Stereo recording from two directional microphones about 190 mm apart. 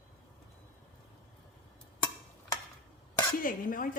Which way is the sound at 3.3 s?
45° left (ahead or behind).